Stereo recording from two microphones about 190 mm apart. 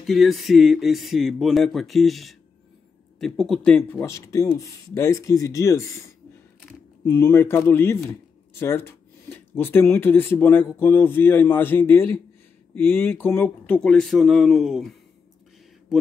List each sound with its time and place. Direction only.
0.0 s speech: centre (ahead or behind)